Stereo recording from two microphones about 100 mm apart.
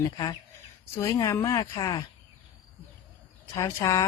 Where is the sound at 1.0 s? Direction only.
30° left (ahead or behind).